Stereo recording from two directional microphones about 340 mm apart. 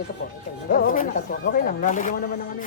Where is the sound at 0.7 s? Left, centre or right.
Left.